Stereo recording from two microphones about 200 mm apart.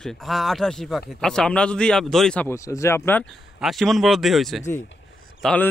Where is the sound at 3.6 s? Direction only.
Centre (ahead or behind).